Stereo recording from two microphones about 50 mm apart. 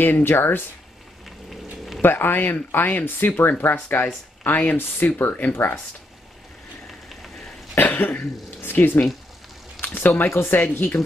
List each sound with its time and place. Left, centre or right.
0.0 s speech: left
2.0 s speech: left
6.9 s a sound: centre
7.8 s cough: left
9.8 s speech: left